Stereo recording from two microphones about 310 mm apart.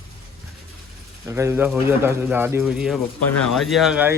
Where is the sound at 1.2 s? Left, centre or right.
Centre.